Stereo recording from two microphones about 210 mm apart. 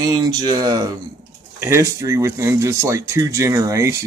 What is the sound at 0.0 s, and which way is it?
Speech, 20° right (ahead or behind).